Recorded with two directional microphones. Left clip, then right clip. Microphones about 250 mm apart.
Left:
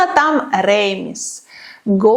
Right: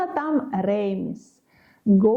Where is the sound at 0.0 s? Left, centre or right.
Centre.